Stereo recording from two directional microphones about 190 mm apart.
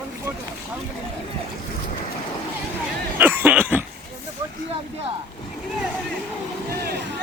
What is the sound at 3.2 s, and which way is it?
Cough, 10° right (ahead or behind).